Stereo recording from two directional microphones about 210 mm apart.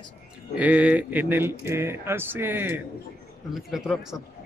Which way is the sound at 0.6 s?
5° right (ahead or behind).